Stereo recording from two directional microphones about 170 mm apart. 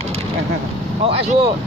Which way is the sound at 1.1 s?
35° right (ahead or behind).